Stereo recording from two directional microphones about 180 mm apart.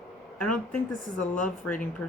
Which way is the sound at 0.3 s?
5° left (ahead or behind).